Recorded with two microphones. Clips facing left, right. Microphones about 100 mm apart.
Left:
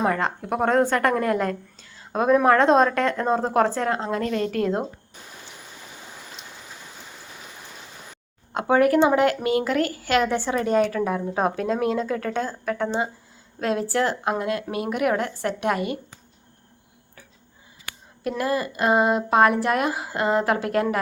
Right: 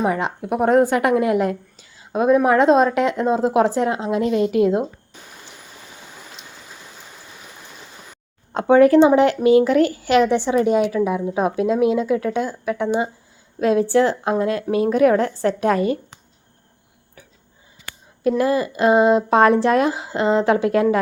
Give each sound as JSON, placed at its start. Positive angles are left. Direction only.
{"t": 0.0, "sound": "speech", "side_deg": -10}
{"t": 8.5, "sound": "a woman's voice", "side_deg": -25}
{"t": 18.2, "sound": "a woman's voice", "side_deg": -25}